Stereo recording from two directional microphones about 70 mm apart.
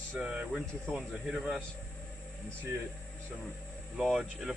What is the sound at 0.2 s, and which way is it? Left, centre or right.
Speech, centre.